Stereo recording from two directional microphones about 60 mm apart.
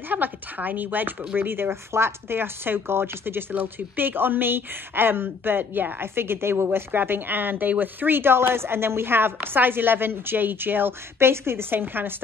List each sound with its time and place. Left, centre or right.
0.1 s speech: right